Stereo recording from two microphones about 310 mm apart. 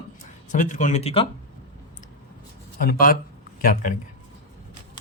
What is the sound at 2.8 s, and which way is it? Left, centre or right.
Speech, left.